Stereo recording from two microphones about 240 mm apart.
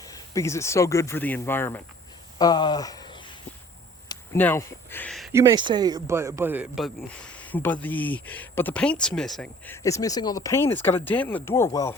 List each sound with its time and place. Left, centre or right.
0.0 s speech: centre
2.4 s a sound: centre
4.1 s speech: centre
5.3 s speech: centre